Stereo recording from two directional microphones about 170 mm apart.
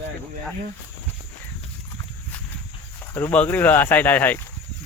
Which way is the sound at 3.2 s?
10° left (ahead or behind).